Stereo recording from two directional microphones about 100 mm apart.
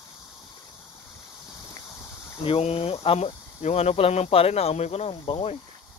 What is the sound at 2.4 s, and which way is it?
Speech, 80° left.